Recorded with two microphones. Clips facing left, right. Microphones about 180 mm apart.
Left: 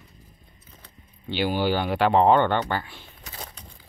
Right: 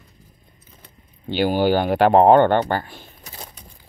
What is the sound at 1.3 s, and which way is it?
Speech, 45° right (ahead or behind).